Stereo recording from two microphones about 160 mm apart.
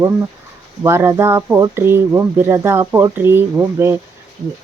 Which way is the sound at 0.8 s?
15° right (ahead or behind).